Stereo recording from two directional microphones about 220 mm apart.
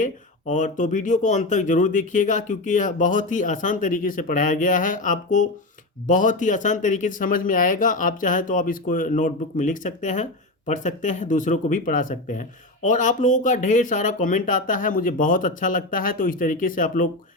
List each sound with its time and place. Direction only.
0.0 s speech: 35° left (ahead or behind)